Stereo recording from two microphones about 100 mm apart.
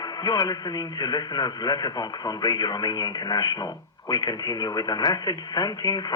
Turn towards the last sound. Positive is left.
turn(degrees=40)  # may be behind; listen again after turning